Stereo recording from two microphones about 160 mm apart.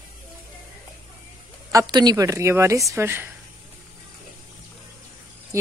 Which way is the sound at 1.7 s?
25° right (ahead or behind).